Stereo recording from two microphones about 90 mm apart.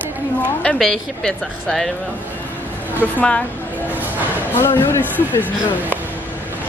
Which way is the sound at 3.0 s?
15° left (ahead or behind).